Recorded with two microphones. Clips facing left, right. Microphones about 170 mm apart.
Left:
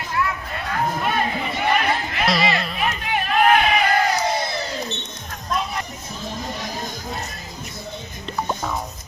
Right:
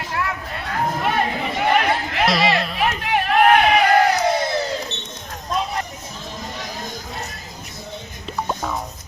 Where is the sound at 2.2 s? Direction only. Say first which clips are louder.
Right 2 dB; centre (ahead or behind).